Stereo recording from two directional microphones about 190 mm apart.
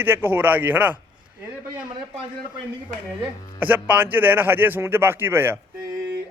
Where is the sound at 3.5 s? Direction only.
10° right (ahead or behind).